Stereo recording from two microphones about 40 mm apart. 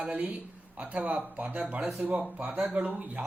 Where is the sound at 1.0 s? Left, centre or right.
Right.